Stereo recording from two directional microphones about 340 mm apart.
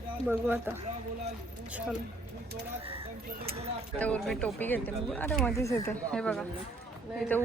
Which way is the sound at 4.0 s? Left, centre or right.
Centre.